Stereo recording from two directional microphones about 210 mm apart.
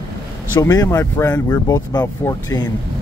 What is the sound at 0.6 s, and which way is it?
Speech, 15° left (ahead or behind).